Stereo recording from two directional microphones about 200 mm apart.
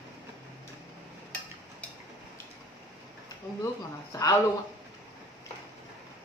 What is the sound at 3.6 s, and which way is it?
Speech, 15° left (ahead or behind).